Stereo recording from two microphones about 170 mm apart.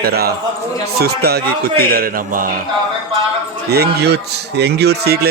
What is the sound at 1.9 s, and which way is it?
Speech, 55° right (ahead or behind).